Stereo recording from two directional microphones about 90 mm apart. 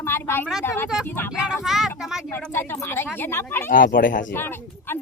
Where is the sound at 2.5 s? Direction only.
25° left (ahead or behind).